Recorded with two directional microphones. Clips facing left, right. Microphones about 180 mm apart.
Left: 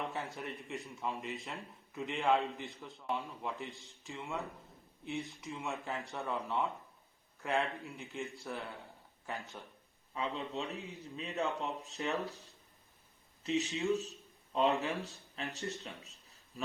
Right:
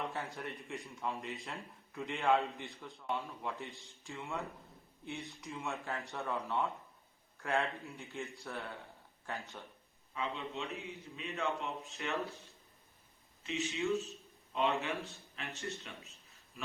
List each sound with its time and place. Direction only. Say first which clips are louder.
0.1 s a man's voice: left 1 dB; centre (ahead or behind)
10.2 s a man's voice: left 2 dB; 35° left (ahead or behind)
13.4 s a man's voice: left 3 dB; 35° left (ahead or behind)